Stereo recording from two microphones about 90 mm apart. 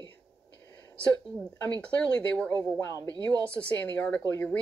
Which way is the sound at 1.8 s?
15° left (ahead or behind).